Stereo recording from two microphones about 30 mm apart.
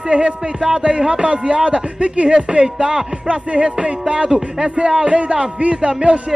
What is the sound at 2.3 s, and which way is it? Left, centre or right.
Music, right.